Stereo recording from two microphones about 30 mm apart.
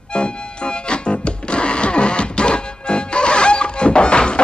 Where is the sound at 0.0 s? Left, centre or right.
Left.